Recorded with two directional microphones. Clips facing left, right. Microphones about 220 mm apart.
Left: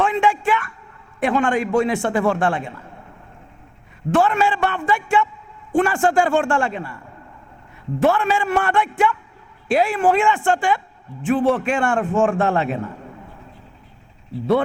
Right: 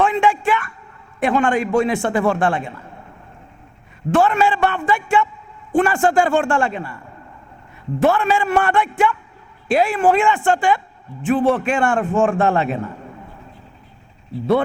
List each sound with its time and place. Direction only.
0.0 s a sound: 15° right (ahead or behind)
1.2 s a man's voice: 15° right (ahead or behind)
4.1 s a man's voice: 15° right (ahead or behind)
8.1 s a man's voice: 15° right (ahead or behind)